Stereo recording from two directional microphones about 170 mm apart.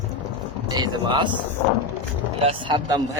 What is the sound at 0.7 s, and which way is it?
Speech, 25° right (ahead or behind).